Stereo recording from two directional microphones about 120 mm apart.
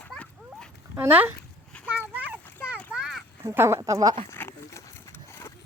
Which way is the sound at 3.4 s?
20° right (ahead or behind).